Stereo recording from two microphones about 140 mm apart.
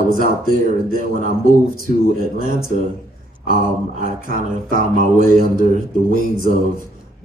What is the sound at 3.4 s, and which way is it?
Mantra, 75° right (ahead or behind).